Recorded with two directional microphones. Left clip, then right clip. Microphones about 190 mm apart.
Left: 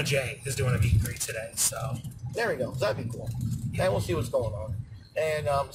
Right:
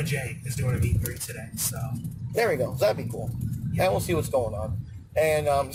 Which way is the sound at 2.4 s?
35° right (ahead or behind).